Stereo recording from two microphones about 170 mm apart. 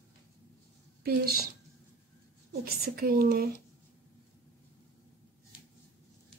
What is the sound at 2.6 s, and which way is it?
Speech, 65° right (ahead or behind).